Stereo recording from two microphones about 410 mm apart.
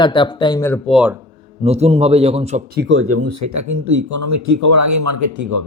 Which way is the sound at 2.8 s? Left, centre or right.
Right.